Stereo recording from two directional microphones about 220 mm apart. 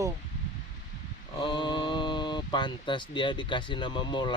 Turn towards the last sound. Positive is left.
turn(degrees=20)  # may be behind; listen again after turning